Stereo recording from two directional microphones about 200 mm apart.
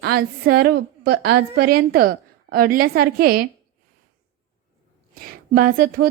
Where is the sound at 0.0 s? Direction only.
50° right (ahead or behind).